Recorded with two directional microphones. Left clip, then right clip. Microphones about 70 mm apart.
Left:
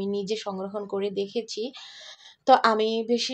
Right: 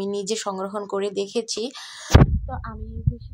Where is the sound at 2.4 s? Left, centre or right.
Centre.